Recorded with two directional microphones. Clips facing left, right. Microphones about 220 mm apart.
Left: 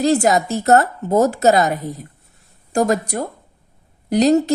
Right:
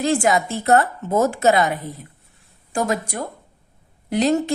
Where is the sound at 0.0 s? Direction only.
40° left (ahead or behind).